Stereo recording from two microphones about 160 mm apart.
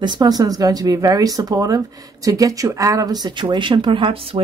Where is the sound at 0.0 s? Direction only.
25° right (ahead or behind).